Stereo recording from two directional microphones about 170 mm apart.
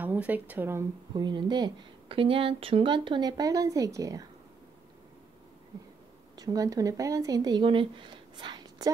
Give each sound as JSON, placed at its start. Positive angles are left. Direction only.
{"t": 0.0, "sound": "speech", "side_deg": -10}
{"t": 1.1, "sound": "speech", "side_deg": -25}
{"t": 6.3, "sound": "speech", "side_deg": -20}